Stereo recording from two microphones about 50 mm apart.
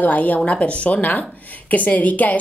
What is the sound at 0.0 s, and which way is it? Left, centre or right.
A woman's voice, left.